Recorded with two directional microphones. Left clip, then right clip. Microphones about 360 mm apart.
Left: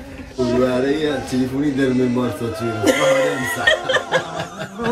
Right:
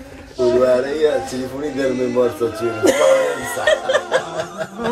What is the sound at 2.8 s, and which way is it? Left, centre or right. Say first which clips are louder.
Music: right 2 dB; right.